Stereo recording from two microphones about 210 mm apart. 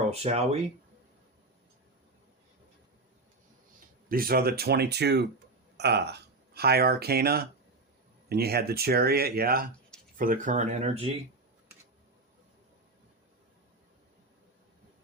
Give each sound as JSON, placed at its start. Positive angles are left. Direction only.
{"t": 0.1, "sound": "speech", "side_deg": -30}
{"t": 4.1, "sound": "speech", "side_deg": -45}